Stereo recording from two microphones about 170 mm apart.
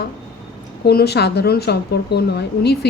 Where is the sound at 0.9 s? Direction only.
70° left (ahead or behind).